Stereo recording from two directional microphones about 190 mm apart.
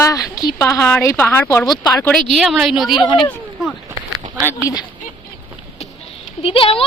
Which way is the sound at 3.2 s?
Centre (ahead or behind).